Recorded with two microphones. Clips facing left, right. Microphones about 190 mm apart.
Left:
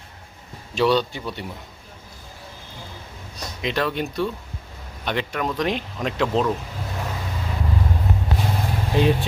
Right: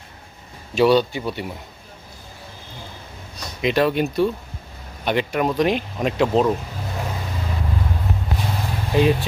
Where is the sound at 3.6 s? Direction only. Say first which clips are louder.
Right 6 dB; 10° right (ahead or behind).